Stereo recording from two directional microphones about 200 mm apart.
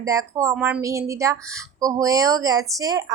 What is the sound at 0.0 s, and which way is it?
Speech, 15° right (ahead or behind).